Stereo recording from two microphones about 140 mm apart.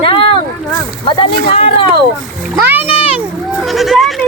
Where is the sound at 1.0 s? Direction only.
40° left (ahead or behind).